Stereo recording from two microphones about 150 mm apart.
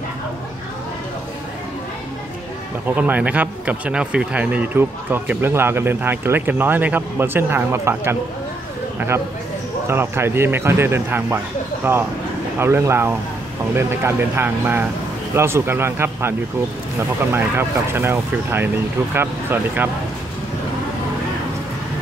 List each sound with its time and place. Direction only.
3.0 s speech: 10° right (ahead or behind)
9.8 s speech: 15° right (ahead or behind)